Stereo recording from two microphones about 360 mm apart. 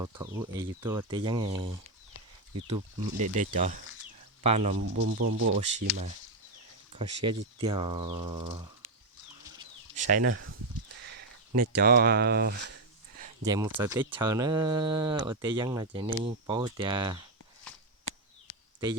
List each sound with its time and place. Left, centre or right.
0.0 s speech: centre
4.8 s speech: right
6.9 s speech: centre
9.6 s a sound: right
11.0 s speech: right
13.4 s speech: centre